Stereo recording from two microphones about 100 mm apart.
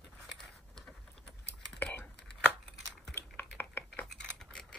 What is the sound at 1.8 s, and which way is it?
Typing, 15° left (ahead or behind).